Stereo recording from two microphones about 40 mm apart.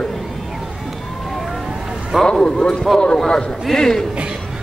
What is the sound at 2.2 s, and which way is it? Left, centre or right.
Speech, left.